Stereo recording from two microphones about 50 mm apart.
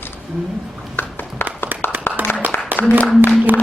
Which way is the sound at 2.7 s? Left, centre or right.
Right.